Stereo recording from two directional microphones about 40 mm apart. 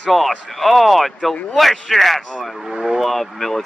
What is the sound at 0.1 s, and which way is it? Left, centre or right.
Speech, centre.